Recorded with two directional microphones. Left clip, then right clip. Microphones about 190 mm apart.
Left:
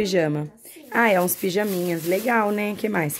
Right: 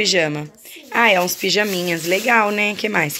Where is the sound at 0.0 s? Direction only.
25° left (ahead or behind).